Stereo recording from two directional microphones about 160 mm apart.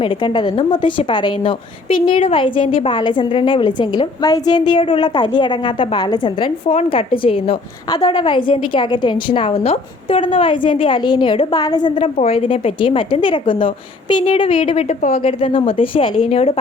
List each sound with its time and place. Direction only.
0.0 s a woman's voice: 30° left (ahead or behind)
11.9 s a woman's voice: 40° left (ahead or behind)